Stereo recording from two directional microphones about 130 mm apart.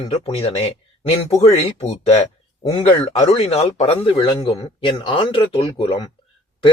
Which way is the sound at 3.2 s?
55° left (ahead or behind).